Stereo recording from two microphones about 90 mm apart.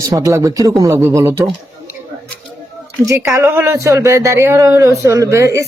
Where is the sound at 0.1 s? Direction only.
40° right (ahead or behind).